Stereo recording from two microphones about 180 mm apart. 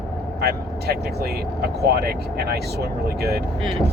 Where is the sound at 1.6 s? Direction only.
60° right (ahead or behind).